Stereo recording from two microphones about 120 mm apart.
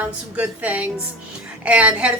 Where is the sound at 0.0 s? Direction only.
15° right (ahead or behind).